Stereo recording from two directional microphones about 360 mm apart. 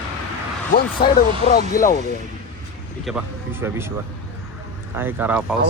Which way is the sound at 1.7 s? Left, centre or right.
Left.